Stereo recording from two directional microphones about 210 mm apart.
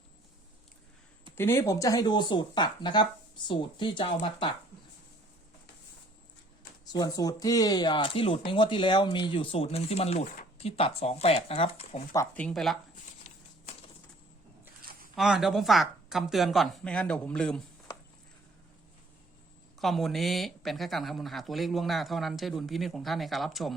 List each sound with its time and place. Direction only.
1.4 s speech: 10° left (ahead or behind)
6.9 s speech: 15° left (ahead or behind)
12.1 s speech: 10° left (ahead or behind)
14.8 s a sound: 45° right (ahead or behind)
15.1 s speech: centre (ahead or behind)
19.8 s speech: centre (ahead or behind)